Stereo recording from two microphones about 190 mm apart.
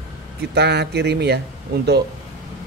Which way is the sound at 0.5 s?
60° right (ahead or behind).